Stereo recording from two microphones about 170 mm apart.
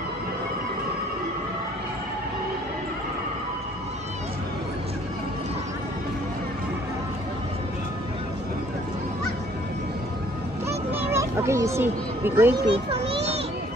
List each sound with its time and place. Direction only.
10.7 s children playing: 15° right (ahead or behind)
12.6 s a child's voice: 35° right (ahead or behind)